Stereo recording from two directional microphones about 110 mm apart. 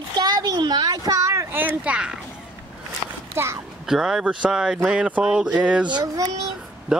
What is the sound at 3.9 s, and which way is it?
Speech, 5° right (ahead or behind).